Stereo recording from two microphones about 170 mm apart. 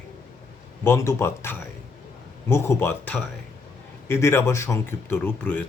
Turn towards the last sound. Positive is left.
turn(degrees=10)  # may be behind; listen again after turning